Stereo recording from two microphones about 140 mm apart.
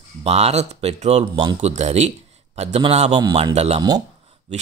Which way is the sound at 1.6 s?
55° right (ahead or behind).